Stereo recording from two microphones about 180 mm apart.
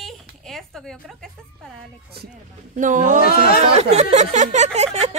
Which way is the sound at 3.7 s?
35° right (ahead or behind).